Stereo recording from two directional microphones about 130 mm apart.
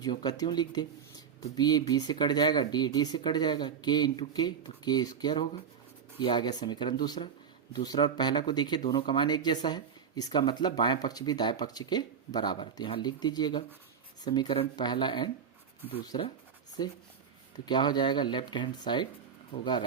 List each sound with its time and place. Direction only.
0.0 s speech: 30° left (ahead or behind)